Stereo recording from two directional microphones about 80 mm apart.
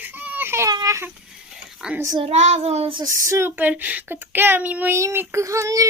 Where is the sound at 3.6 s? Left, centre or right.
Right.